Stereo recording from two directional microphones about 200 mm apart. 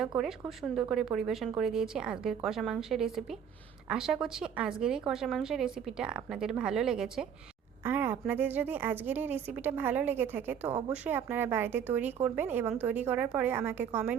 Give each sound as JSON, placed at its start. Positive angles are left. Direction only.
{"t": 0.2, "sound": "a woman's voice", "side_deg": 0}
{"t": 10.6, "sound": "a woman's voice", "side_deg": -30}
{"t": 10.9, "sound": "a woman's voice", "side_deg": -10}